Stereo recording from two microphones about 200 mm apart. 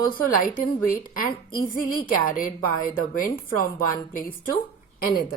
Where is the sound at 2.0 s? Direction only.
45° left (ahead or behind).